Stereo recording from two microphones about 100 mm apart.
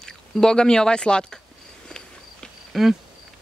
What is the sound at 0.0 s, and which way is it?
Speech, 5° left (ahead or behind).